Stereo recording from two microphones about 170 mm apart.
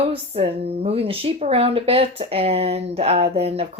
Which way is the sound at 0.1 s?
35° right (ahead or behind).